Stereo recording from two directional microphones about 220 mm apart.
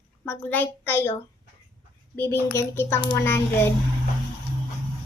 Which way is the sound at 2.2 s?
10° left (ahead or behind).